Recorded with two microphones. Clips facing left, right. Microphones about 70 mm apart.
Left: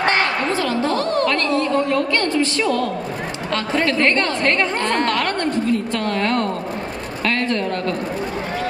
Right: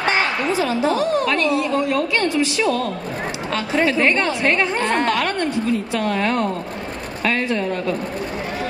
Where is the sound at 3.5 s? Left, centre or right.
Centre.